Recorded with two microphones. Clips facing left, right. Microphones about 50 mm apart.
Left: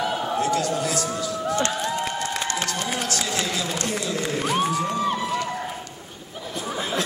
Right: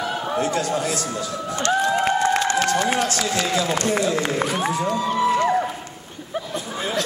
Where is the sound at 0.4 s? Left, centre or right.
Right.